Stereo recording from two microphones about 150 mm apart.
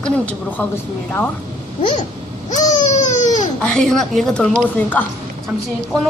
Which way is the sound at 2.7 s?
50° left (ahead or behind).